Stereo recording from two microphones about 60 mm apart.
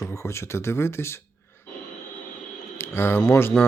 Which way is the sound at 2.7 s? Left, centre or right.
Left.